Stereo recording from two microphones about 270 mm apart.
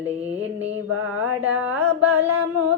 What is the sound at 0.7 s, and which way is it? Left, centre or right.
Mantra, right.